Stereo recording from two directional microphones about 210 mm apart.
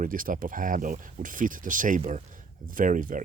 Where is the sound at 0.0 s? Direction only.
40° right (ahead or behind).